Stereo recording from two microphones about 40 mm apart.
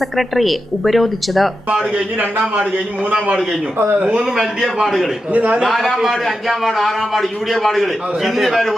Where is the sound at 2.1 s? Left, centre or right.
Right.